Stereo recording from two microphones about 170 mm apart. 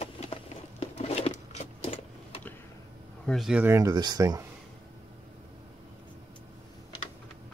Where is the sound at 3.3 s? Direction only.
Centre (ahead or behind); by 4.4 s 25° right (ahead or behind).